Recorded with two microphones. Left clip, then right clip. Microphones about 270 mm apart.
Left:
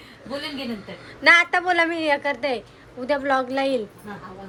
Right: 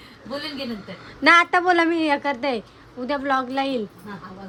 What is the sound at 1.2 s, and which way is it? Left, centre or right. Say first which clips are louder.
A woman's voice: right 1 dB; right.